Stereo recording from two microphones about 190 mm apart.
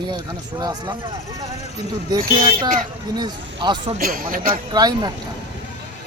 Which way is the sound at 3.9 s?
45° right (ahead or behind).